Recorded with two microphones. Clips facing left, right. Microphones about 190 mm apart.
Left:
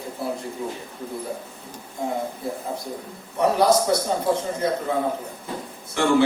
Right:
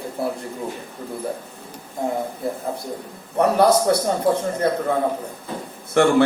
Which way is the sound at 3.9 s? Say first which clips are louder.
Right 3 dB; 55° right (ahead or behind).